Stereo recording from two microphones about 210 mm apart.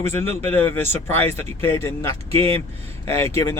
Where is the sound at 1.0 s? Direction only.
10° left (ahead or behind).